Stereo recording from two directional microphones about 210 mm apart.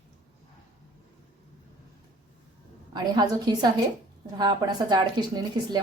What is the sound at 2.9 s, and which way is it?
Speech, 20° right (ahead or behind).